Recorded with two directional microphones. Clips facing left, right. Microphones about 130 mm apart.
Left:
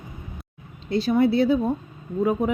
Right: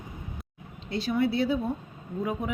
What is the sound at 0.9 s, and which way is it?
Speech, 40° left (ahead or behind).